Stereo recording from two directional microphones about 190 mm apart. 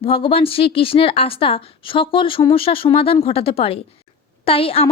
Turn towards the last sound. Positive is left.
turn(degrees=30)  # may be behind; listen again after turning